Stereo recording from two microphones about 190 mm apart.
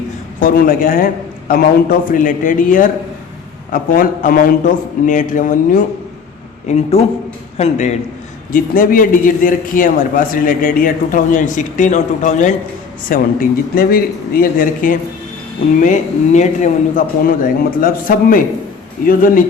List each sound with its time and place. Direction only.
0.3 s a man's voice: 45° left (ahead or behind)